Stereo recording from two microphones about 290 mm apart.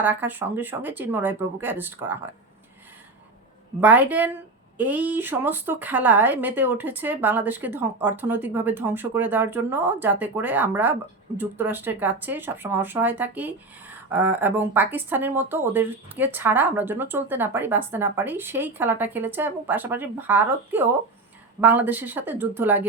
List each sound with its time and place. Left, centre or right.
0.0 s speech: centre
3.8 s a woman's voice: centre